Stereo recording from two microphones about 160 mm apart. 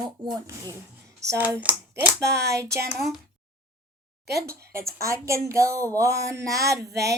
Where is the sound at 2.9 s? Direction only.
Centre (ahead or behind).